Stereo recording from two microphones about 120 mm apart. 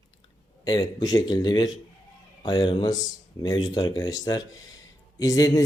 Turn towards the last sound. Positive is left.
turn(degrees=30)  # may be behind; listen again after turning